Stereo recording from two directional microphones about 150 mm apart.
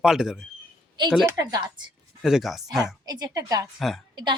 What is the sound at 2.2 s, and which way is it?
Speech, centre (ahead or behind).